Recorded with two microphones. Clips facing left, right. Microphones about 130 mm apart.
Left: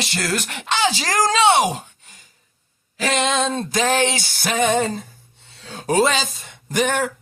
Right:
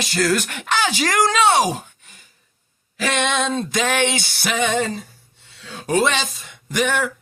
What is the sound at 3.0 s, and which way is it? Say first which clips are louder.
A woman's voice: left 1 dB; 30° left (ahead or behind).